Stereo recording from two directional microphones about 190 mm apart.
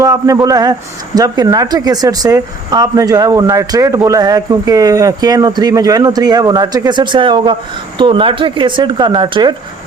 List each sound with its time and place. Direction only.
0.0 s a man's voice: 20° right (ahead or behind)